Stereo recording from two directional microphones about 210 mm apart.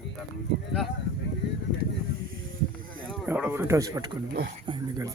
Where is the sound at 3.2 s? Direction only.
10° right (ahead or behind).